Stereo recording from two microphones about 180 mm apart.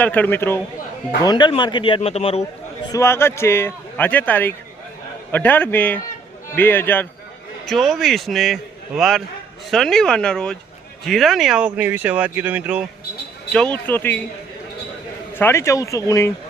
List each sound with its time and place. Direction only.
0.0 s a man's voice: 10° left (ahead or behind)
1.2 s a man's voice: 25° left (ahead or behind)
2.9 s a man's voice: 15° left (ahead or behind)
7.7 s speech: centre (ahead or behind)
13.5 s a man's voice: 5° left (ahead or behind)
15.4 s a man's voice: 15° left (ahead or behind)